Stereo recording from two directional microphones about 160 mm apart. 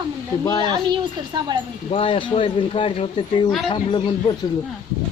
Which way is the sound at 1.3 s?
25° right (ahead or behind).